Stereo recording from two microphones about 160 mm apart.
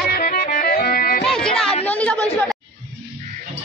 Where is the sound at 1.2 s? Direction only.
5° left (ahead or behind).